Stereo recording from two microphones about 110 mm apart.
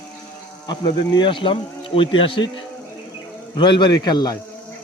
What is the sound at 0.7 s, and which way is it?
Speech, 45° left (ahead or behind).